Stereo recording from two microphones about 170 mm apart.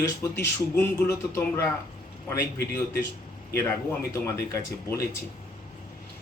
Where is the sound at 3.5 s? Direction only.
10° left (ahead or behind).